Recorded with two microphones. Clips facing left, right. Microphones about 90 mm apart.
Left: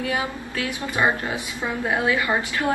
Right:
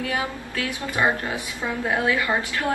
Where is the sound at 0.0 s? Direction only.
25° left (ahead or behind).